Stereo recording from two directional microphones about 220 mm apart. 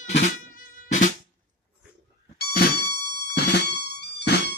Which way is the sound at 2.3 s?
45° left (ahead or behind).